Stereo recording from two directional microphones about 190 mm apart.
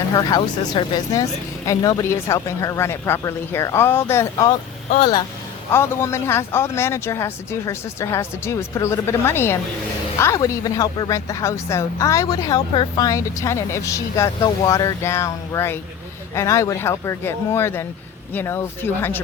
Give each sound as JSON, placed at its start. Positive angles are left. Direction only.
{"t": 0.1, "sound": "speech", "side_deg": 20}
{"t": 5.7, "sound": "speech", "side_deg": 15}